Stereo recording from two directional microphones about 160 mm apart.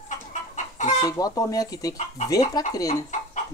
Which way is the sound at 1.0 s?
20° left (ahead or behind).